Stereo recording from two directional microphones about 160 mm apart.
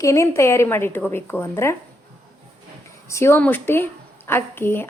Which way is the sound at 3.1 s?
15° left (ahead or behind).